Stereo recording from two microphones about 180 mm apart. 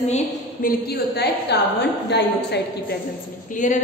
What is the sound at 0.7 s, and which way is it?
A woman's voice, 60° left (ahead or behind).